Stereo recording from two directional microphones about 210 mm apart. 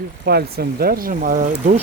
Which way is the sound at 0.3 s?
50° right (ahead or behind).